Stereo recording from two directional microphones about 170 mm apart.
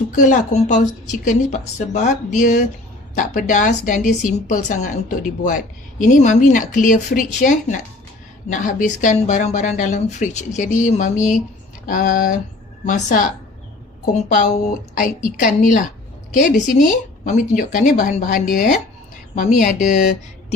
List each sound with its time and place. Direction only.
0.1 s a woman's voice: 50° left (ahead or behind)